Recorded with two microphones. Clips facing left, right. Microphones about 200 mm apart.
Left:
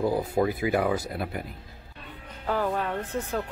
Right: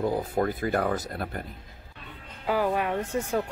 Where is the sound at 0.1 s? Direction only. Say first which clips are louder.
Left 2 dB; 10° left (ahead or behind).